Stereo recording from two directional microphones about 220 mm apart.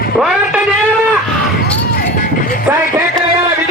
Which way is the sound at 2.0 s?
40° left (ahead or behind).